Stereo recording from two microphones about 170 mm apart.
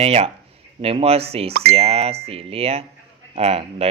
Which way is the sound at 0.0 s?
35° right (ahead or behind).